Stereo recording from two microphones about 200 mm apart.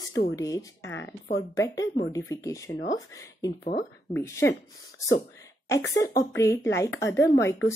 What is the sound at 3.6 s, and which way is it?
Speech, 40° left (ahead or behind).